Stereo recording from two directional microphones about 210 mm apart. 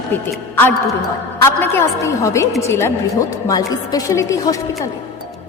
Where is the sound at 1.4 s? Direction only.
10° left (ahead or behind).